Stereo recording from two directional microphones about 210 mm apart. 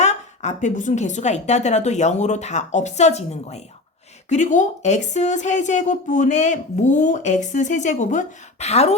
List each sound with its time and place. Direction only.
0.0 s a woman's voice: 35° left (ahead or behind)